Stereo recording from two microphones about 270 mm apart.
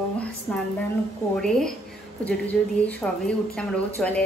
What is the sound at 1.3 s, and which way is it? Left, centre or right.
Speech, centre.